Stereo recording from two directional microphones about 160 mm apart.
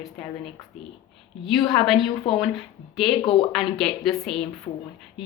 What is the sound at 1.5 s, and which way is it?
A woman's voice, centre (ahead or behind).